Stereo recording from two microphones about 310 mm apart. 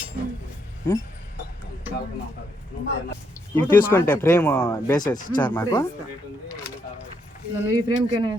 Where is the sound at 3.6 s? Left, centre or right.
Centre.